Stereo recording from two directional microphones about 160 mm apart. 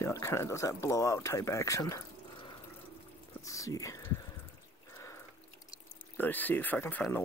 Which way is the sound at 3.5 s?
20° left (ahead or behind).